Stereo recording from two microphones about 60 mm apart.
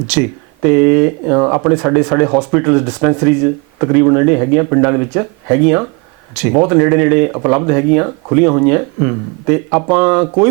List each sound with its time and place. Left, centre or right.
0.1 s speech: centre